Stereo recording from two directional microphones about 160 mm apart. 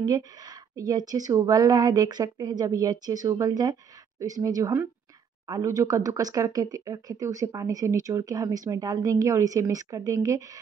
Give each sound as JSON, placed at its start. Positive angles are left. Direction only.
{"t": 0.0, "sound": "speech", "side_deg": -25}